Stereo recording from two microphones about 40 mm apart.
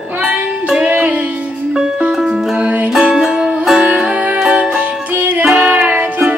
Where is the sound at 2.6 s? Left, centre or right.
Right.